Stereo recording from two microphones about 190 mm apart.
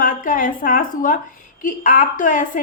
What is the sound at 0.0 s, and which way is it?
A woman's voice, 45° left (ahead or behind).